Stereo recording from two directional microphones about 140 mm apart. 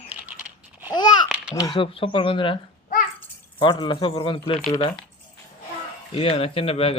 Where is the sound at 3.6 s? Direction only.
35° left (ahead or behind).